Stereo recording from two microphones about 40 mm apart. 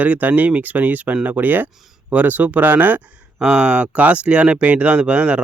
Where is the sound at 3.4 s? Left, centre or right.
Right.